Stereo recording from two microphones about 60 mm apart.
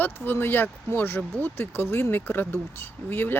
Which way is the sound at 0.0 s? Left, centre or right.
Left.